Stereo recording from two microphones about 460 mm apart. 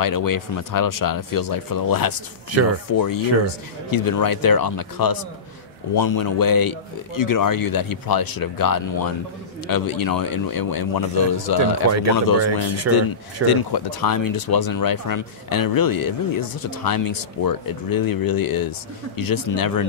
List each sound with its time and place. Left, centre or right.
0.0 s speech: left
11.9 s speech: right
13.5 s speech: left